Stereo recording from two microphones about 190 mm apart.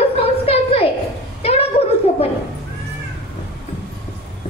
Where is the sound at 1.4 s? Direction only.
35° left (ahead or behind).